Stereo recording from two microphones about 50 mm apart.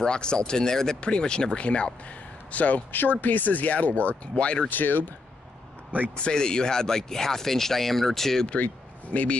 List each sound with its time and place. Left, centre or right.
0.0 s speech: centre
2.5 s speech: left
4.6 s speech: left
6.1 s speech: centre
8.5 s speech: left